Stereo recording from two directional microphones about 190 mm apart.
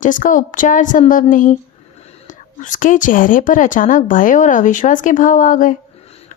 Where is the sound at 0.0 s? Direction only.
45° left (ahead or behind).